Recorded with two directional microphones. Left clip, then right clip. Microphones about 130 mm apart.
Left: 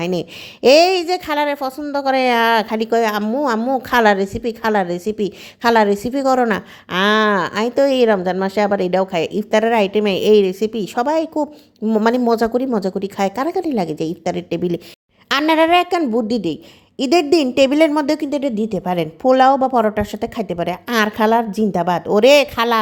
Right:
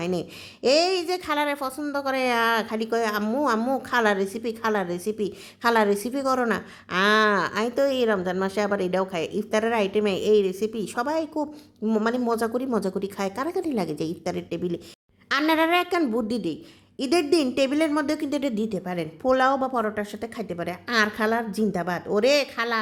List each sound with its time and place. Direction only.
0.0 s a woman's voice: 40° left (ahead or behind)
11.8 s speech: 20° left (ahead or behind)
12.2 s a woman's voice: 35° left (ahead or behind)
18.3 s speech: 20° left (ahead or behind)
18.7 s a woman's voice: 40° left (ahead or behind)